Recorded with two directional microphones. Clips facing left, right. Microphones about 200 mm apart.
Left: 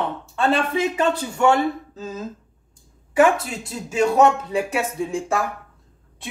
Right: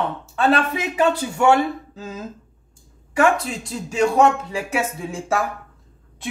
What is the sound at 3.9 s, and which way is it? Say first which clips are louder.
Speech: even; 5° left (ahead or behind).